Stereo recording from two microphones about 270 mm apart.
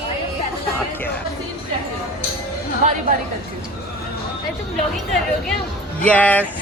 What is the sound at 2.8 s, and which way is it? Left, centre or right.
Chatter, right.